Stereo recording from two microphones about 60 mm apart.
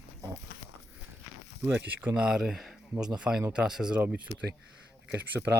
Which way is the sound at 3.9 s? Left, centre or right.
Right.